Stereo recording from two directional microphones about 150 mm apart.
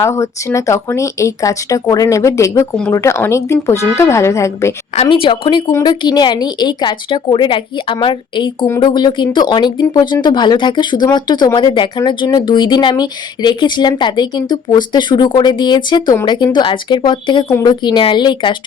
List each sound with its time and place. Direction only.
0.0 s speech: 20° left (ahead or behind)
5.0 s a woman's voice: 35° left (ahead or behind)